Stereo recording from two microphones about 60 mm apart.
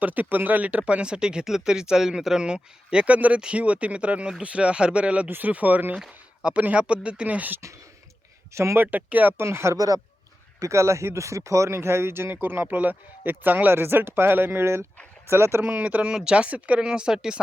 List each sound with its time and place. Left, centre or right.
0.0 s speech: right
8.5 s speech: right
8.8 s speech: right
9.4 s speech: right
9.7 s speech: right
10.6 s speech: right
15.6 s speech: right